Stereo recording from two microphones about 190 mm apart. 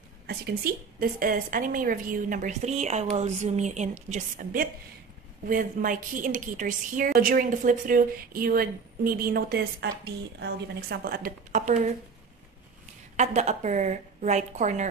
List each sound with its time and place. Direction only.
0.3 s a woman's voice: 50° right (ahead or behind)
13.1 s a woman's voice: 40° right (ahead or behind)